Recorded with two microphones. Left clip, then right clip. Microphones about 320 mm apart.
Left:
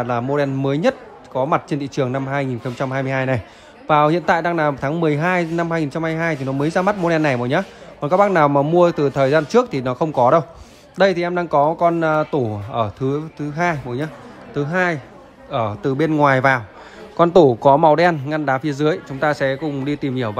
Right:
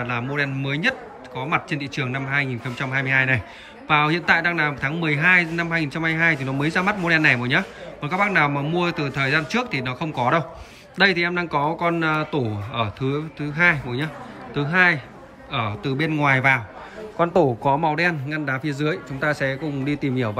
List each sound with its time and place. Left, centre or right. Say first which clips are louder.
0.0 s speech: left 5 dB; centre
17.2 s speech: left 7 dB; right
17.9 s a man's voice: left 6 dB; centre